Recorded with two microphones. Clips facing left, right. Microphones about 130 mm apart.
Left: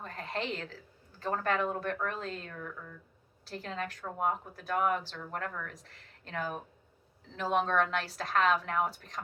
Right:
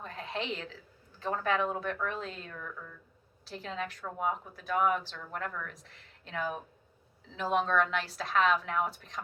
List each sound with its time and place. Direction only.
0.0 s cat: 45° left (ahead or behind)
1.3 s speech: 45° left (ahead or behind)